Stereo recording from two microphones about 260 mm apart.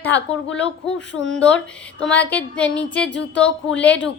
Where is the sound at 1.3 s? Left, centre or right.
Centre.